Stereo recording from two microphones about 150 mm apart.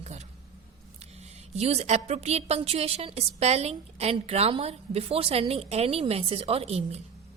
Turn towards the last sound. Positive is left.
turn(degrees=-45)  # may be behind; listen again after turning